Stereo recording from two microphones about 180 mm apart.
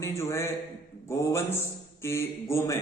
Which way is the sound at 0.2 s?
15° left (ahead or behind).